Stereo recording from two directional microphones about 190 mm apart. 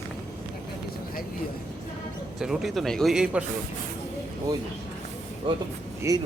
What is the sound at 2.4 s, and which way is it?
Speech, centre (ahead or behind).